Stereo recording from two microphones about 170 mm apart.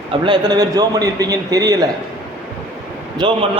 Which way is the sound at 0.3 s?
25° right (ahead or behind).